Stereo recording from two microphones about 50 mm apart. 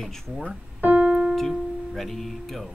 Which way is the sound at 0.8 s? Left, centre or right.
Right.